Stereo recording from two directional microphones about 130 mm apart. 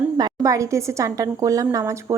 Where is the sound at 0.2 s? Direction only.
30° right (ahead or behind).